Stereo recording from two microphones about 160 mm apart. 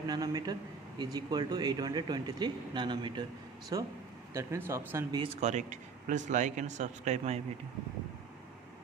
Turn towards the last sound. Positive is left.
turn(degrees=-45)  # may be behind; listen again after turning